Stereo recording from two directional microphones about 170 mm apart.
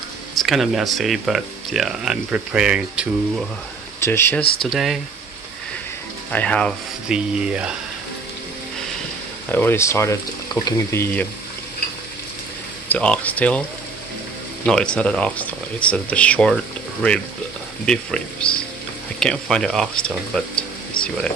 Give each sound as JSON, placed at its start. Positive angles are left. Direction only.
{"t": 0.4, "sound": "speech", "side_deg": 0}
{"t": 4.0, "sound": "speech", "side_deg": 15}
{"t": 6.3, "sound": "speech", "side_deg": 5}
{"t": 7.1, "sound": "speech", "side_deg": -5}
{"t": 9.5, "sound": "speech", "side_deg": 10}
{"t": 12.8, "sound": "speech", "side_deg": 10}
{"t": 14.7, "sound": "speech", "side_deg": 5}
{"t": 17.8, "sound": "speech", "side_deg": 5}